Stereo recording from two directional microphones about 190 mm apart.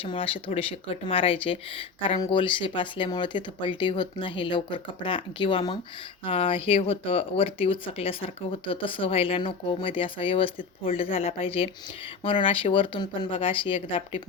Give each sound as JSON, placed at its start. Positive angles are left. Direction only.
{"t": 0.0, "sound": "speech", "side_deg": 30}